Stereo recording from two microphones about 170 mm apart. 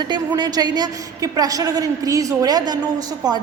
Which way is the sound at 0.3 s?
25° right (ahead or behind).